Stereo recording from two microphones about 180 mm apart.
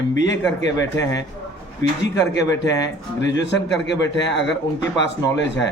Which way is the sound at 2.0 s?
75° left (ahead or behind).